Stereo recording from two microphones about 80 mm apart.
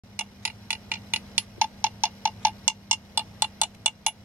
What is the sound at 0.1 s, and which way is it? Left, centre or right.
Clock, right.